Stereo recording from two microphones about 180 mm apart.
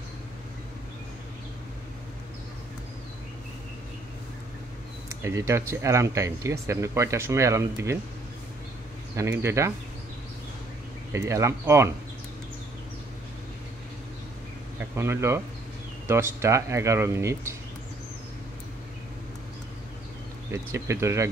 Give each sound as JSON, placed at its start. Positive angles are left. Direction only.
{"t": 5.2, "sound": "speech", "side_deg": -15}
{"t": 9.1, "sound": "speech", "side_deg": -15}
{"t": 11.1, "sound": "speech", "side_deg": -15}
{"t": 15.0, "sound": "speech", "side_deg": -15}
{"t": 20.5, "sound": "speech", "side_deg": -15}